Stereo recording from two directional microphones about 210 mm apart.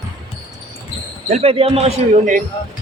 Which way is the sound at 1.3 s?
30° right (ahead or behind).